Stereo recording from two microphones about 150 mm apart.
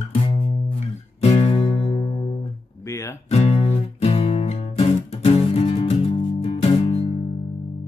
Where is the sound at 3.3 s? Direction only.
45° left (ahead or behind).